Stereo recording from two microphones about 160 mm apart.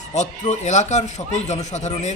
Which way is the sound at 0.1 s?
45° left (ahead or behind).